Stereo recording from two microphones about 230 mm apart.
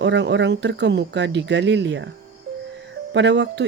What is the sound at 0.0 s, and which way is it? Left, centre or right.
Speech, right.